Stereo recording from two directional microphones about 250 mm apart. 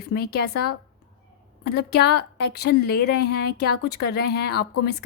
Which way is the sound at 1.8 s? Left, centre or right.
Left.